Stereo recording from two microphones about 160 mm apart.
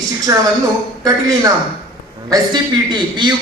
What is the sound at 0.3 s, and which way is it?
Speech, 25° right (ahead or behind).